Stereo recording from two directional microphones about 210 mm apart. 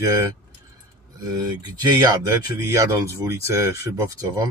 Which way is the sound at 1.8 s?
20° right (ahead or behind).